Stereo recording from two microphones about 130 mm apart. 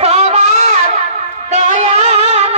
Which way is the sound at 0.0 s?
55° right (ahead or behind).